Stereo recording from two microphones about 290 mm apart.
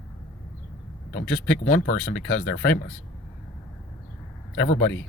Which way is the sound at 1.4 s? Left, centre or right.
Left.